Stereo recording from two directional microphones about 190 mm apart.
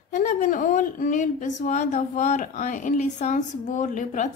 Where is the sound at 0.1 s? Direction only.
40° left (ahead or behind).